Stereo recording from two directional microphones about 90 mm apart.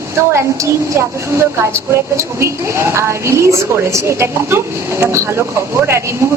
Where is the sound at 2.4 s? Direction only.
30° right (ahead or behind).